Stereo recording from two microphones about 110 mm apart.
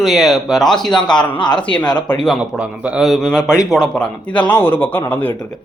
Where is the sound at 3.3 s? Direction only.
30° left (ahead or behind).